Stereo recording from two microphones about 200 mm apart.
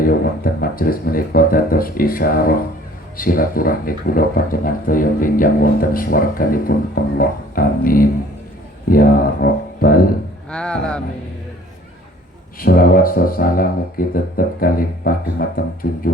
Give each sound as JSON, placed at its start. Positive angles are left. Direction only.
{"t": 0.0, "sound": "speech", "side_deg": 45}
{"t": 10.5, "sound": "speech", "side_deg": 5}
{"t": 12.5, "sound": "speech", "side_deg": 45}